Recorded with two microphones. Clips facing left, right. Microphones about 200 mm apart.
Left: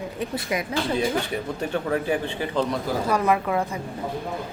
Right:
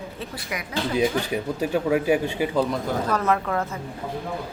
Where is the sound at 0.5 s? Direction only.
25° left (ahead or behind).